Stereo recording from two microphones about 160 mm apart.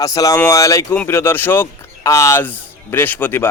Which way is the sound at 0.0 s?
20° left (ahead or behind).